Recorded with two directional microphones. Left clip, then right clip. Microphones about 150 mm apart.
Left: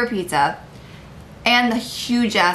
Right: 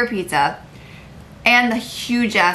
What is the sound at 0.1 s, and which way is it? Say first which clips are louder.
Speech: right 1 dB; centre (ahead or behind).